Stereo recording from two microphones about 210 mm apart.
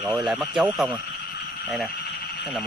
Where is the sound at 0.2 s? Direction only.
Centre (ahead or behind).